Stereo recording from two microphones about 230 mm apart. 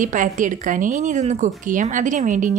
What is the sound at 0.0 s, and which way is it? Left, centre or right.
Speech, right.